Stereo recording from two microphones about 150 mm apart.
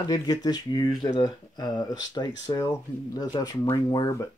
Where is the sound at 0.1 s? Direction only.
25° left (ahead or behind).